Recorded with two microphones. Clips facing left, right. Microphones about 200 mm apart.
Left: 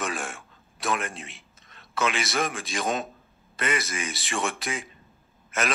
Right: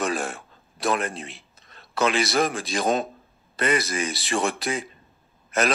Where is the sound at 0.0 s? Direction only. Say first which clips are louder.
Right 5 dB; 35° right (ahead or behind).